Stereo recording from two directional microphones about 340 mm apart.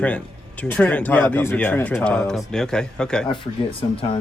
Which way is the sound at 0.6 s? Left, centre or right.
Centre.